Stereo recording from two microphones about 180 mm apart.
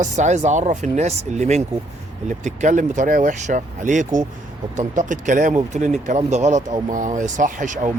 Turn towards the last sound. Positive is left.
turn(degrees=-45)  # may be behind; listen again after turning